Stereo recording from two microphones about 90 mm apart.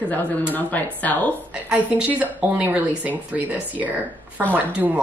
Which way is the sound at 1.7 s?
15° right (ahead or behind).